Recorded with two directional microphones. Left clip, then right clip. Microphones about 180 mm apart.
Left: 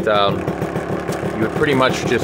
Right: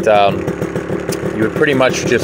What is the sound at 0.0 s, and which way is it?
Speech, 15° right (ahead or behind).